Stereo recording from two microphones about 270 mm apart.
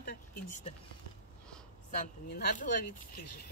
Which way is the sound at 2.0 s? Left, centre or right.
Left.